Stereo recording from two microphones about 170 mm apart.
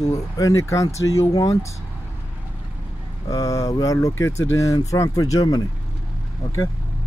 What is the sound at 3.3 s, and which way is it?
Speech, 20° left (ahead or behind).